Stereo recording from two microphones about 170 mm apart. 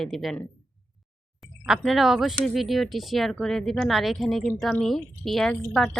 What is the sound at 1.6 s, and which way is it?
Speech, centre (ahead or behind).